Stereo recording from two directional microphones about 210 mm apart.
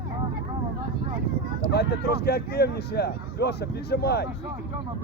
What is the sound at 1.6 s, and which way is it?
Speech, 50° left (ahead or behind).